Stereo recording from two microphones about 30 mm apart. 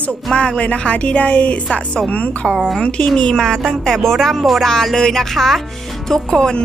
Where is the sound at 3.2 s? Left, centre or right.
Left.